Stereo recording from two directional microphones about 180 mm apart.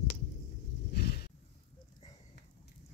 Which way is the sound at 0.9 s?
60° left (ahead or behind).